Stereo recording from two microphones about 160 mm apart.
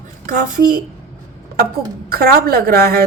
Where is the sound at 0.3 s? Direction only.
55° right (ahead or behind).